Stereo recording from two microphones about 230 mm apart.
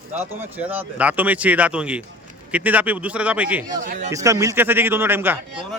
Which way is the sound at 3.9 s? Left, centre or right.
Right.